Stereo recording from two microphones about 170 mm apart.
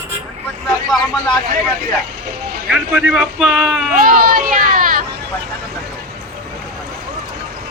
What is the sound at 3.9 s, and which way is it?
Speech, 55° right (ahead or behind).